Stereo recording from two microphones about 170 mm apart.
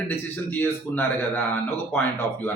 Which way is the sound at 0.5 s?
15° left (ahead or behind).